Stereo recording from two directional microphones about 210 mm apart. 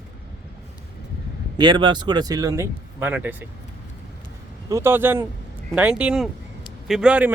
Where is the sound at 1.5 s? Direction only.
20° right (ahead or behind).